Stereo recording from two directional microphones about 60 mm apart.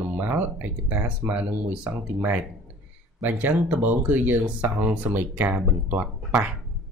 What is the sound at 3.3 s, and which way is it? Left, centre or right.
Speech, right.